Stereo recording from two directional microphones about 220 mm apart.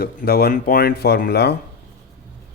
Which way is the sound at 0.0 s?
45° left (ahead or behind).